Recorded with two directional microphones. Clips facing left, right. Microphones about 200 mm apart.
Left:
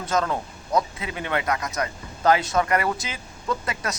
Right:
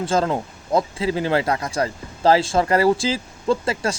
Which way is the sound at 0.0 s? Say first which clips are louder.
Right 4 dB; 30° right (ahead or behind).